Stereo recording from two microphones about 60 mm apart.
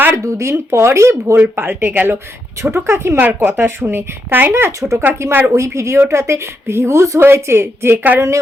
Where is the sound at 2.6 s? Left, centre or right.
Right.